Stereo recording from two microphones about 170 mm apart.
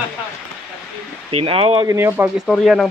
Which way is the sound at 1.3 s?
35° right (ahead or behind).